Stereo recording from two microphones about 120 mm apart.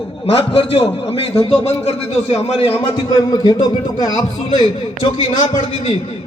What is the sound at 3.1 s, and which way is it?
A man's voice, 35° left (ahead or behind).